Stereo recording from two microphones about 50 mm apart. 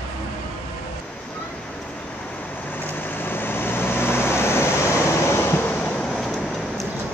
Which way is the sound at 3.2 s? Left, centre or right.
Left.